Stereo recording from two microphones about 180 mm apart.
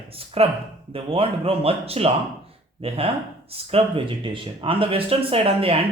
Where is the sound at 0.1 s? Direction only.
30° right (ahead or behind).